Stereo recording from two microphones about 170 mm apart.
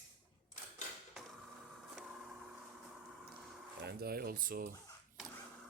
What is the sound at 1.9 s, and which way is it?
Vehicle, 5° right (ahead or behind).